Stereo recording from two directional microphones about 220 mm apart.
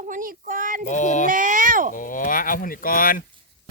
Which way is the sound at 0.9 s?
35° left (ahead or behind).